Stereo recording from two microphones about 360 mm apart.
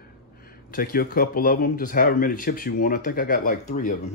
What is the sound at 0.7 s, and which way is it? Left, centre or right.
Speech, left.